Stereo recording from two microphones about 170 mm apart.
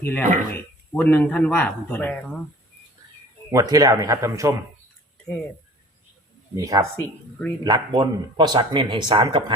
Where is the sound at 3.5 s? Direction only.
20° right (ahead or behind).